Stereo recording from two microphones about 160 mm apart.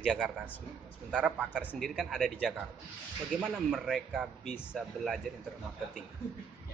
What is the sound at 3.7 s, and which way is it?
Speech, centre (ahead or behind).